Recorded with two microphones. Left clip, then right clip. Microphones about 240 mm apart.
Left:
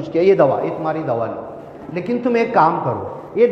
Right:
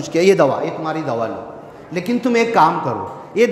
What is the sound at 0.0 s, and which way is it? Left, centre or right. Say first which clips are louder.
A man's voice: even; right.